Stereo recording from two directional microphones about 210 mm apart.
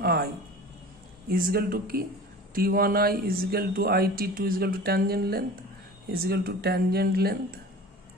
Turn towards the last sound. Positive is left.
turn(degrees=-45)  # may be behind; listen again after turning